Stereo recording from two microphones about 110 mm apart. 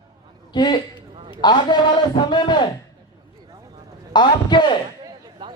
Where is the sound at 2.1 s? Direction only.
45° left (ahead or behind).